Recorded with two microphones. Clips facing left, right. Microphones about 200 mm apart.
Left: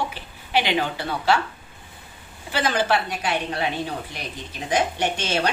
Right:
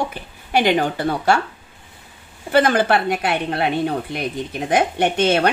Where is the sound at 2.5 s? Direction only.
55° right (ahead or behind).